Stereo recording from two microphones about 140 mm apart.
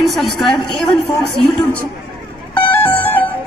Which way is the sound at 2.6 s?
10° left (ahead or behind).